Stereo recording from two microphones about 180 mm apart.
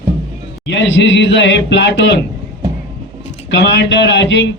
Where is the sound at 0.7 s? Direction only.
80° left.